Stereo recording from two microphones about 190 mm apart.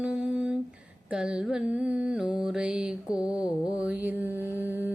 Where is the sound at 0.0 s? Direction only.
5° right (ahead or behind).